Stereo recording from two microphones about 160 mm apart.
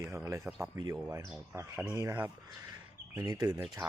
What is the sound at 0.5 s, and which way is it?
Speech, 10° right (ahead or behind).